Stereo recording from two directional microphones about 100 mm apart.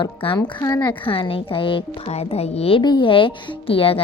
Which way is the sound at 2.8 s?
50° left (ahead or behind).